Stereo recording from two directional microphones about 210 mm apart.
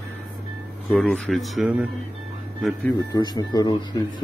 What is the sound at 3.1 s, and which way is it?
Speech, 20° left (ahead or behind).